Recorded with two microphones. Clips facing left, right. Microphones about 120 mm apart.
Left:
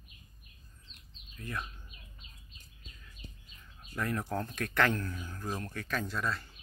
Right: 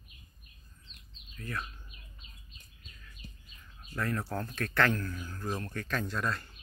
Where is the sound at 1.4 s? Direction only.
20° left (ahead or behind).